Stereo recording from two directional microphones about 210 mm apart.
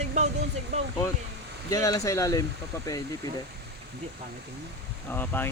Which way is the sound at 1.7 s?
15° left (ahead or behind).